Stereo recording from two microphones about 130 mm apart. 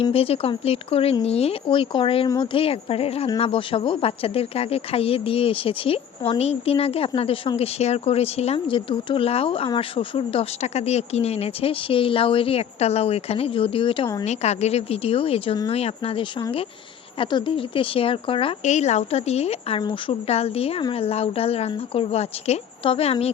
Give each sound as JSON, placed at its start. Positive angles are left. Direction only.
{"t": 0.0, "sound": "speech", "side_deg": 50}
{"t": 8.7, "sound": "speech", "side_deg": 40}
{"t": 14.3, "sound": "speech", "side_deg": 55}
{"t": 18.6, "sound": "speech", "side_deg": 65}
{"t": 19.8, "sound": "speech", "side_deg": 40}
{"t": 20.2, "sound": "speech", "side_deg": 50}